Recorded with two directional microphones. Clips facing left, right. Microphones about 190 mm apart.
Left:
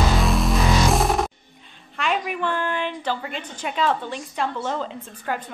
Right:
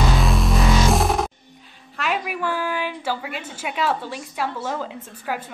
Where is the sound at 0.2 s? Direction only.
Centre (ahead or behind).